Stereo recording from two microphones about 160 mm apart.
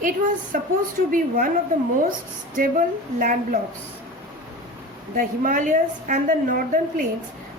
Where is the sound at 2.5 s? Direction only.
55° right (ahead or behind).